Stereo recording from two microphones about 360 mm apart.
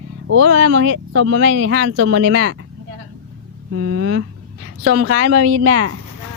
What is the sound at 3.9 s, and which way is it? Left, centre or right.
Speech, right.